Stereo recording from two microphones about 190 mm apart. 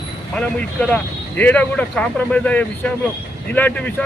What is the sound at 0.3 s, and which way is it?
Speech, 5° left (ahead or behind).